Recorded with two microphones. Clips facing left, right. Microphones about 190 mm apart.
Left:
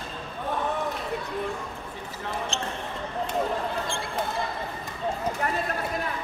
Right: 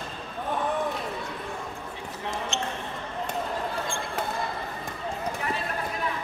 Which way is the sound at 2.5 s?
35° left (ahead or behind).